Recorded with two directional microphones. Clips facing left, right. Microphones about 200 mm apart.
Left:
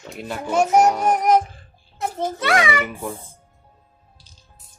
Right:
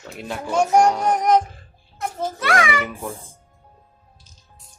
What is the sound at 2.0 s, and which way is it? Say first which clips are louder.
Speech: left 2 dB; 25° left (ahead or behind).